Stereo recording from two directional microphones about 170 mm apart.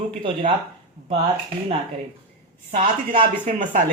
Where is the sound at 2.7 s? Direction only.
45° right (ahead or behind).